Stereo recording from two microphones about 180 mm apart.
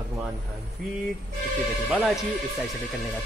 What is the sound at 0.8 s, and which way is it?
Speech, 5° left (ahead or behind).